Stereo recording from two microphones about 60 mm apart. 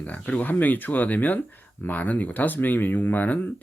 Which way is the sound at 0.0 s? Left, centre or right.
Left.